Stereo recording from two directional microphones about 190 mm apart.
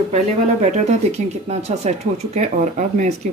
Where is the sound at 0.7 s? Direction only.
35° right (ahead or behind).